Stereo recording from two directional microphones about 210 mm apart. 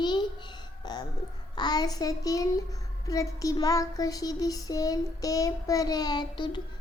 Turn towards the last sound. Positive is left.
turn(degrees=20)  # may be behind; listen again after turning